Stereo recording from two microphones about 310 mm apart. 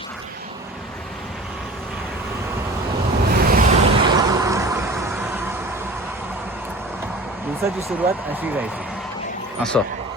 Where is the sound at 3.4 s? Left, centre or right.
Right.